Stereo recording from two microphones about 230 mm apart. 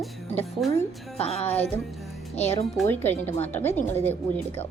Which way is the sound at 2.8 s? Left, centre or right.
Centre.